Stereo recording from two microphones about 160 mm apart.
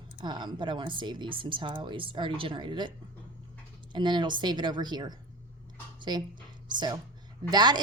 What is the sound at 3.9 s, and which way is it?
A woman's voice, 30° right (ahead or behind).